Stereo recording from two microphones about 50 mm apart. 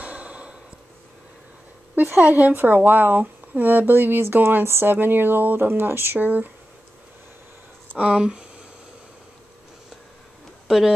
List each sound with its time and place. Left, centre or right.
0.0 s sigh: right
2.0 s speech: right
6.1 s speech: right
8.0 s speech: right